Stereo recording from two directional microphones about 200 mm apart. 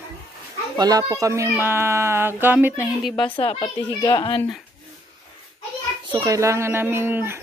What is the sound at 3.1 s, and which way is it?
A child's voice, 25° left (ahead or behind).